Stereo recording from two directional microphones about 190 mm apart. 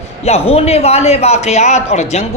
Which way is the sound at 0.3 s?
30° left (ahead or behind).